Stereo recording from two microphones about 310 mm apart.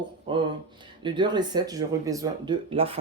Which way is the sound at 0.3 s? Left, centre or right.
Centre.